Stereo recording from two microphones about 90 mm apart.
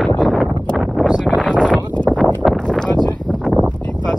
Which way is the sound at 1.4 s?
10° left (ahead or behind).